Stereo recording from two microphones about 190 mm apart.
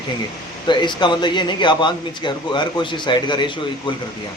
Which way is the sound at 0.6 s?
25° left (ahead or behind).